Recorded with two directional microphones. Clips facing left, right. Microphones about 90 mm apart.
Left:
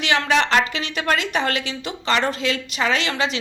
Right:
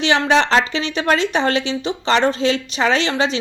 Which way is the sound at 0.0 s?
25° right (ahead or behind).